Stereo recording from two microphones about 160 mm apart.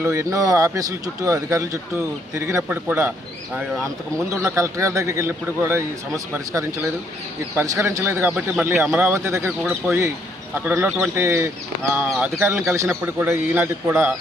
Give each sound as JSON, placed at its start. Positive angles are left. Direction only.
{"t": 0.0, "sound": "speech", "side_deg": -20}
{"t": 4.4, "sound": "speech", "side_deg": -20}